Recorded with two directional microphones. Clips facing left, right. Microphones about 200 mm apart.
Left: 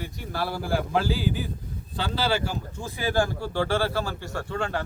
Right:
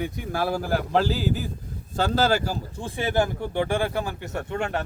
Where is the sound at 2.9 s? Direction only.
20° right (ahead or behind).